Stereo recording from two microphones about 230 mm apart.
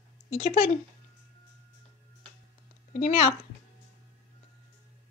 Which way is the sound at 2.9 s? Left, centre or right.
Left.